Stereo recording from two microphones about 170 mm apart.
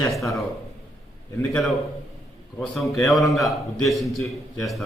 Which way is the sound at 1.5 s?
Centre (ahead or behind).